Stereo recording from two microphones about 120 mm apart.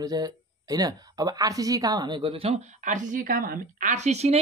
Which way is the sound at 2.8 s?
90° right.